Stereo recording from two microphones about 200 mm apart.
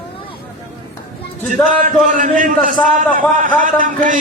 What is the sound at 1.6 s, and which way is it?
A man's voice, 40° right (ahead or behind).